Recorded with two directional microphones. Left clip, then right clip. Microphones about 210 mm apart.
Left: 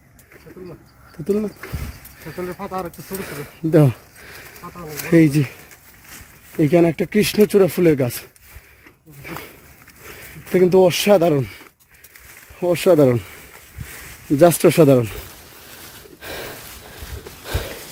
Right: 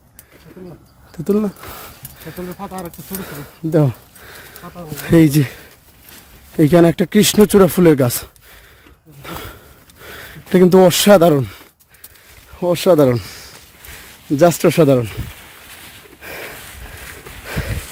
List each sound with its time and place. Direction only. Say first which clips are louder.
1.3 s speech: right 3 dB; 25° right (ahead or behind)
3.2 s speech: left 2 dB; 5° right (ahead or behind)
5.0 s speech: right 2 dB; 15° right (ahead or behind)
6.6 s speech: right 4 dB; 25° right (ahead or behind)
9.2 s a sound: right 2 dB; 25° right (ahead or behind)
10.2 s speech: right 3 dB; 25° right (ahead or behind)
12.5 s speech: right 2 dB; 10° right (ahead or behind)
14.3 s speech: right 1 dB; centre (ahead or behind)
16.2 s a sound: right 1 dB; 5° left (ahead or behind)